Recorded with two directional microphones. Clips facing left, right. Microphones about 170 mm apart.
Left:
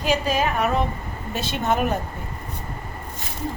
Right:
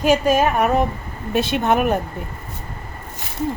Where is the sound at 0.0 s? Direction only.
50° right (ahead or behind).